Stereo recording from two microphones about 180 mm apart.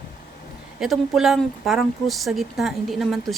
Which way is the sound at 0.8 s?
Centre (ahead or behind).